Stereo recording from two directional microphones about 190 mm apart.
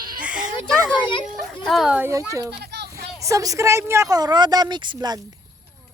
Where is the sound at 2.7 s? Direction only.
60° right (ahead or behind).